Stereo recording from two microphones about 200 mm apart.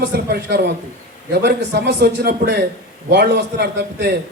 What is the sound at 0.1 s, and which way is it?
A man's voice, 50° right (ahead or behind).